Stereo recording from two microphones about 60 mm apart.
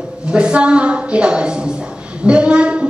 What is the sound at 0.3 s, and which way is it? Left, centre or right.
A woman's voice, centre.